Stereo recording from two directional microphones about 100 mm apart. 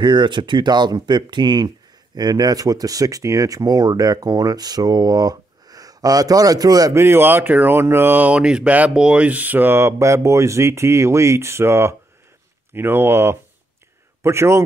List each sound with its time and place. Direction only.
0.0 s speech: 50° right (ahead or behind)
7.0 s speech: 25° right (ahead or behind)